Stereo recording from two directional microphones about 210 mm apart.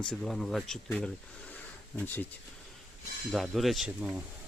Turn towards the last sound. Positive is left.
turn(degrees=-5)  # may be behind; listen again after turning